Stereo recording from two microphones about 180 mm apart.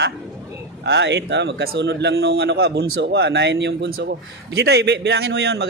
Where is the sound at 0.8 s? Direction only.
75° right (ahead or behind).